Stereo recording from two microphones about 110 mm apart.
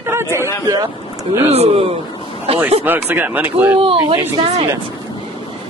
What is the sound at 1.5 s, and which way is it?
A woman's voice, 65° right (ahead or behind).